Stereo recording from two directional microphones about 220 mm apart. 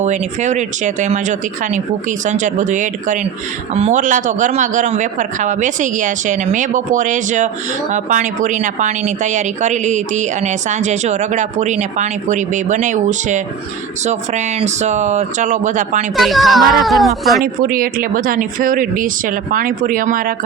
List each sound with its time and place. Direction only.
0.0 s a man's voice: 35° right (ahead or behind)
16.1 s speech: centre (ahead or behind)
17.4 s a man's voice: 40° right (ahead or behind)